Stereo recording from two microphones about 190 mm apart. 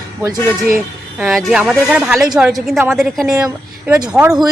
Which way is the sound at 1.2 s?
Centre (ahead or behind).